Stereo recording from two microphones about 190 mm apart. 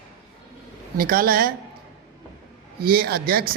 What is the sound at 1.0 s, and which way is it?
Speech, 50° right (ahead or behind).